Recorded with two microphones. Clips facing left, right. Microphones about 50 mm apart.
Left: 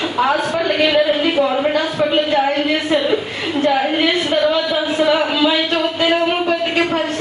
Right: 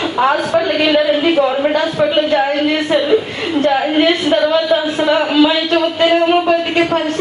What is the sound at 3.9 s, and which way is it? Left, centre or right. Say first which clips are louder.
Speech: right 4 dB; centre.